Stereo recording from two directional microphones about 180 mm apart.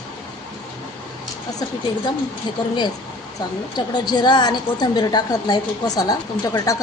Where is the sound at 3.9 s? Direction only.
25° left (ahead or behind).